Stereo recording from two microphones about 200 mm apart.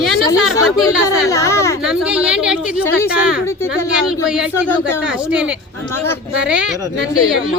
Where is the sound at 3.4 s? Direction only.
15° left (ahead or behind).